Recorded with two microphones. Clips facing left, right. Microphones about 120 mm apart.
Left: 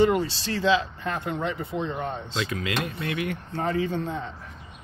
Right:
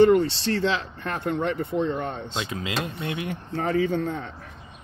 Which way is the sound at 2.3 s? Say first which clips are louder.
Left 2 dB; 20° right (ahead or behind).